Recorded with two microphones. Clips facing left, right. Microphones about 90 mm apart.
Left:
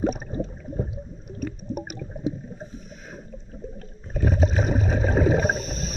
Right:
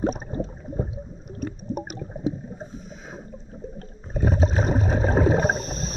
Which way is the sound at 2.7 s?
Centre (ahead or behind).